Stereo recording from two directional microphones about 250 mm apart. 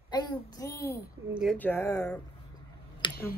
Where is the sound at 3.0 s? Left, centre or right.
Centre.